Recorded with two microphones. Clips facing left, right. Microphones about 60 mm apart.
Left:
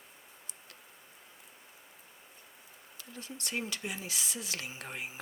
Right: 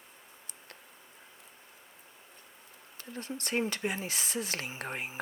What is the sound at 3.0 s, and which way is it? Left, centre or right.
Speech, right.